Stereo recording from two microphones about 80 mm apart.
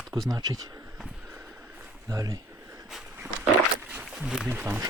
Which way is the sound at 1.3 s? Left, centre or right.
Right.